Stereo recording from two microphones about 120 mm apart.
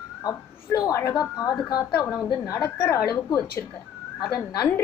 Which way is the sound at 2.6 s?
20° left (ahead or behind).